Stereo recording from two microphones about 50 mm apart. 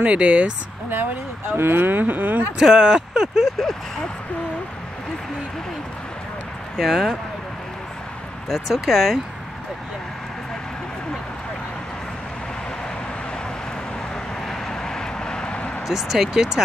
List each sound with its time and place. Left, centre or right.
0.0 s speech: right
1.6 s speech: right
2.6 s speech: centre
6.8 s speech: centre
8.5 s speech: centre
14.5 s vehicle: centre
15.9 s speech: centre